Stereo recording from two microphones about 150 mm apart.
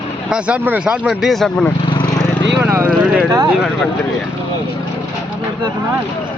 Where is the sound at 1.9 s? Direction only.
30° left (ahead or behind).